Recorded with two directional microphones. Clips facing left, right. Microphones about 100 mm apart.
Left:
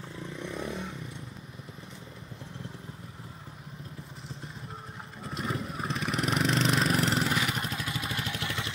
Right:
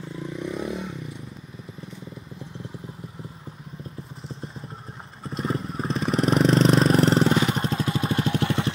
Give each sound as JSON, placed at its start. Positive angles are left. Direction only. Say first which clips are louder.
{"t": 0.4, "sound": "vehicle", "louder": "right 6 dB", "side_deg": -10}
{"t": 5.3, "sound": "vehicle", "louder": "right 6 dB", "side_deg": -30}